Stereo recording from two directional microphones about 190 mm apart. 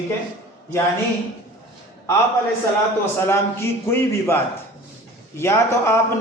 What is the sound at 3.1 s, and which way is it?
A man's voice, 15° left (ahead or behind).